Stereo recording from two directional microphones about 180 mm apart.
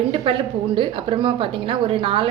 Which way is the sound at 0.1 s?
30° right (ahead or behind).